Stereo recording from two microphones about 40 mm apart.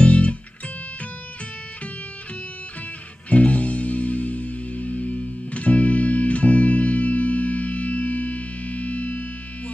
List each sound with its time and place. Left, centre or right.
0.0 s music: left
3.3 s music: left